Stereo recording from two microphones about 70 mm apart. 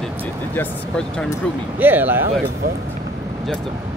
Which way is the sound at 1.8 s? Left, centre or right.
Right.